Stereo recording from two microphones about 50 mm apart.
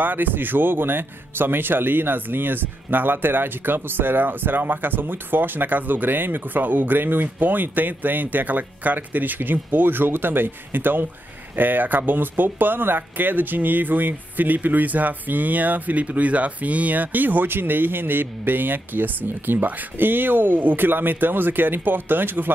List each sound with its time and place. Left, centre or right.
0.0 s speech: right